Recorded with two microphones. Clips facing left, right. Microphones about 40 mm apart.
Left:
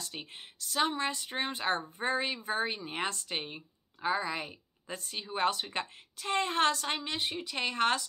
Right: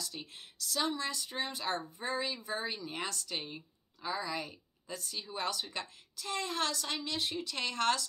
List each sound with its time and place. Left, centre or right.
0.0 s speech: left